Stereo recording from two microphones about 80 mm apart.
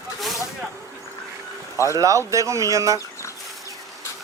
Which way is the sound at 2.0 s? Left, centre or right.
Right.